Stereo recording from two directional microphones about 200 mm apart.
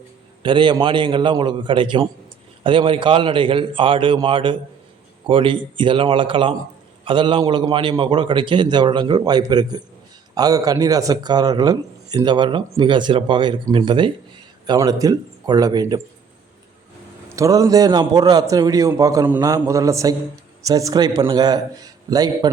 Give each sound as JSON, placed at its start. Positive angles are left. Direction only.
{"t": 0.4, "sound": "speech", "side_deg": -25}
{"t": 17.2, "sound": "a man's voice", "side_deg": -15}